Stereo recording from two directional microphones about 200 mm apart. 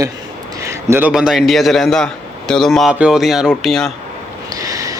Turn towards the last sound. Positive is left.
turn(degrees=-15)  # may be behind; listen again after turning